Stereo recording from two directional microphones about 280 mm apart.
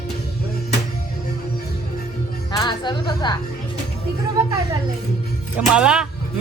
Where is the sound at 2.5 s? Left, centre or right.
Centre.